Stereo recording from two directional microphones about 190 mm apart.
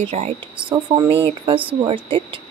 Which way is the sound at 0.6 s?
25° right (ahead or behind).